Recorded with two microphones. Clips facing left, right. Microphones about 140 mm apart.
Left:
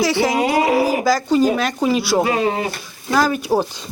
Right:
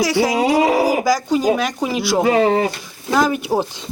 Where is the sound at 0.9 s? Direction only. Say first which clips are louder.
Even; 15° right (ahead or behind).